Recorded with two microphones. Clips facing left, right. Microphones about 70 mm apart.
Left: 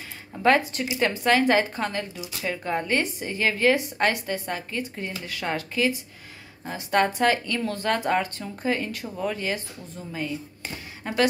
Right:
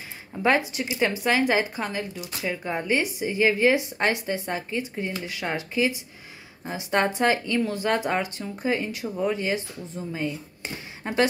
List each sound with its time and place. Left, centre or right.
0.4 s speech: centre